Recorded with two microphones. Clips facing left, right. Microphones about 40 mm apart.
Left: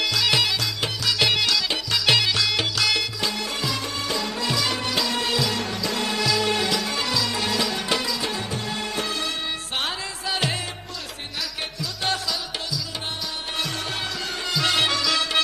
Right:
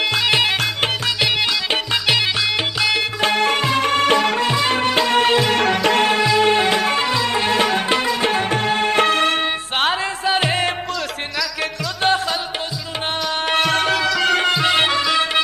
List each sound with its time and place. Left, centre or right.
0.0 s music: right
3.0 s music: right
4.5 s music: right
5.6 s music: right
6.2 s music: right
12.0 s music: right
13.5 s music: right
14.6 s music: right